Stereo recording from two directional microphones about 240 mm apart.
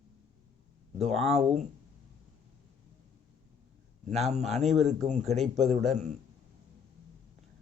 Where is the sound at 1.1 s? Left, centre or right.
Centre.